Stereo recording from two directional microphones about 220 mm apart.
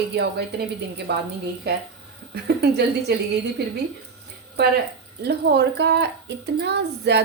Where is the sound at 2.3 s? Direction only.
50° right (ahead or behind).